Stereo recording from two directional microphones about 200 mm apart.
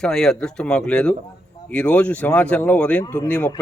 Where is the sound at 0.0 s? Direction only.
Centre (ahead or behind).